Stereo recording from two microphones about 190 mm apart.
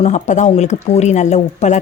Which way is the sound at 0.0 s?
40° left (ahead or behind).